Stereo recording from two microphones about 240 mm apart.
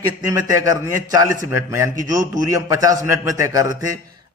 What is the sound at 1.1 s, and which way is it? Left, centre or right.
A man's voice, centre.